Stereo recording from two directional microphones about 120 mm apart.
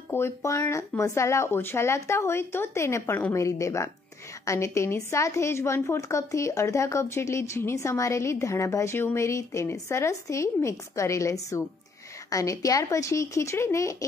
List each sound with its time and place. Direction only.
0.1 s a woman's voice: 25° left (ahead or behind)